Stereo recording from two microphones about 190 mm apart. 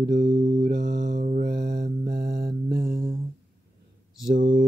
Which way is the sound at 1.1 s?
40° right (ahead or behind).